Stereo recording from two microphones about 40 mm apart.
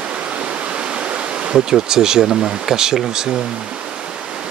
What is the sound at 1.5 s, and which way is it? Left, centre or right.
Speech, centre.